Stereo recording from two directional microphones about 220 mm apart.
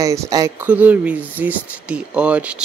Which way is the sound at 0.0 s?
15° right (ahead or behind).